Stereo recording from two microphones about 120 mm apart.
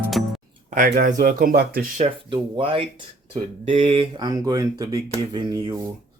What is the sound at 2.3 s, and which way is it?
Mantra, 50° right (ahead or behind).